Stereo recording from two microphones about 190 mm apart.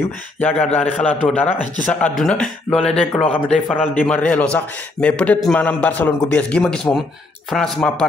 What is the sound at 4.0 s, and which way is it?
A man's voice, 5° left (ahead or behind).